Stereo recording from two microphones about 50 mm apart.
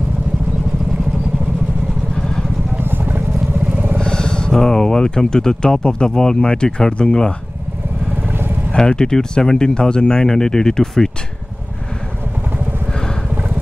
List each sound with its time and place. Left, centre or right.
2.1 s vehicle: centre
2.8 s vehicle: right
3.7 s vehicle: right
4.0 s speech: centre
8.3 s vehicle: right
8.7 s speech: centre